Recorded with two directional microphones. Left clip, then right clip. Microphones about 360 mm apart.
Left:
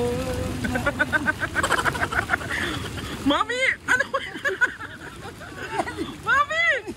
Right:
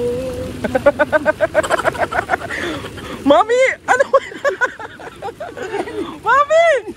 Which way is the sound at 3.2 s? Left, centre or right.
Right.